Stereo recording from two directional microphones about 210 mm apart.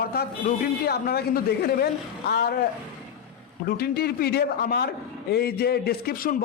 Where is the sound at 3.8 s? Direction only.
50° left (ahead or behind).